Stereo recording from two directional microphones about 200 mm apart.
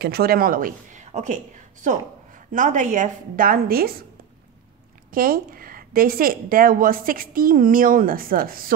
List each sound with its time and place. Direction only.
0.0 s a woman's voice: 50° right (ahead or behind)
5.1 s a woman's voice: 45° right (ahead or behind)